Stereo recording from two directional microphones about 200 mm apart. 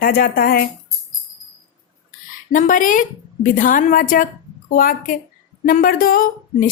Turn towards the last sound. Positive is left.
turn(degrees=45)  # may be behind; listen again after turning